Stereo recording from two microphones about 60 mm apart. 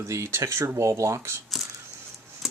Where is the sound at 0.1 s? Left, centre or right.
Right.